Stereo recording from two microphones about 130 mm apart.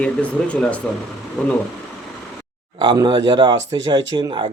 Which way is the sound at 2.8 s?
35° right (ahead or behind).